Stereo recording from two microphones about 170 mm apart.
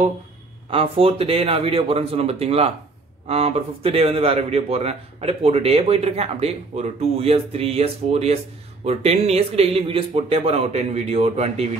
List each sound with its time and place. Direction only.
0.7 s speech: 35° right (ahead or behind)